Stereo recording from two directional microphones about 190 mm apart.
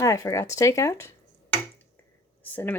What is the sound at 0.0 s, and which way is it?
Speech, 15° left (ahead or behind).